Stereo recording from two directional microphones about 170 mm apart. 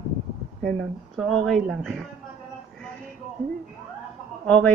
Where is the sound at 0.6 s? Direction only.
Centre (ahead or behind).